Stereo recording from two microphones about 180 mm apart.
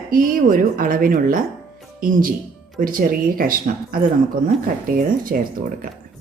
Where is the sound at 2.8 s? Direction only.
50° right (ahead or behind).